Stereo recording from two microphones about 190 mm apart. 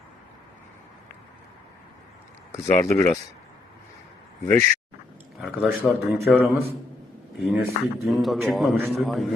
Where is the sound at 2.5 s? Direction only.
15° left (ahead or behind).